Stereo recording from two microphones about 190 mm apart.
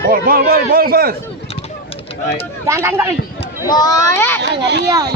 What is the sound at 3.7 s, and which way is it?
Speech, 20° left (ahead or behind).